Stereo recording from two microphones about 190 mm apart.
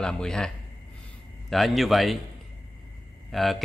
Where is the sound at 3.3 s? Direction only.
Centre (ahead or behind).